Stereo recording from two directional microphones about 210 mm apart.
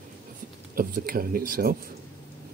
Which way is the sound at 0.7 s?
45° right (ahead or behind).